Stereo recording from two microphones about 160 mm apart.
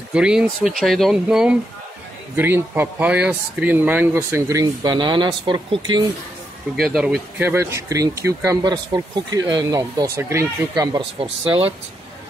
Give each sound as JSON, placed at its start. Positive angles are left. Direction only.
{"t": 0.1, "sound": "speech", "side_deg": -5}
{"t": 6.8, "sound": "speech", "side_deg": 0}
{"t": 7.4, "sound": "speech", "side_deg": -15}